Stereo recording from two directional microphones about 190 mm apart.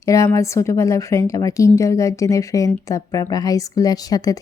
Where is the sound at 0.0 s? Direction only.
15° left (ahead or behind).